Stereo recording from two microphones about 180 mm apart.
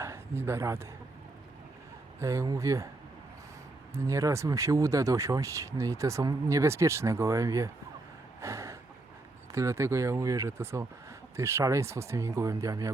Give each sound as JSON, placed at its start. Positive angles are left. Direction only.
{"t": 0.0, "sound": "speech", "side_deg": -15}
{"t": 2.1, "sound": "speech", "side_deg": -15}
{"t": 3.9, "sound": "speech", "side_deg": -15}
{"t": 8.4, "sound": "a sound", "side_deg": -15}
{"t": 9.5, "sound": "speech", "side_deg": -15}